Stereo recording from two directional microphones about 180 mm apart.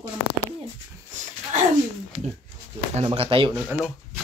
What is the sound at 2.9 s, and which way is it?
Speech, 35° right (ahead or behind).